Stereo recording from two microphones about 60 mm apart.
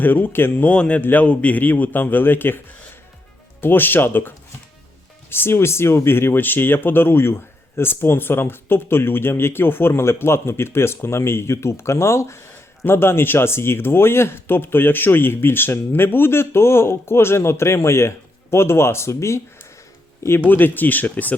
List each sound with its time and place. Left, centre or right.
0.0 s speech: left
0.7 s speech: left
3.6 s speech: left
20.5 s speech: left